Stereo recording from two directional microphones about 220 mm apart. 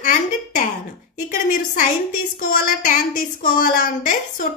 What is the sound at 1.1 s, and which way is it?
Speech, 35° left (ahead or behind).